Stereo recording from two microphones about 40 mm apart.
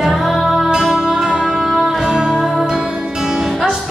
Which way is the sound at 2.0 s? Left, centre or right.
Centre.